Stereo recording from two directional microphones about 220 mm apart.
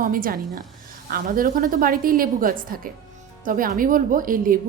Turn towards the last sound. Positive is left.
turn(degrees=-40)  # may be behind; listen again after turning